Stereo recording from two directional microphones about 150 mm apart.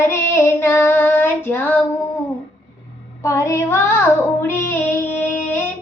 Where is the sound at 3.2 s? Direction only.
20° left (ahead or behind).